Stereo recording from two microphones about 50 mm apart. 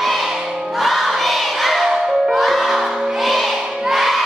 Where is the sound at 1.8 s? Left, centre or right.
Centre.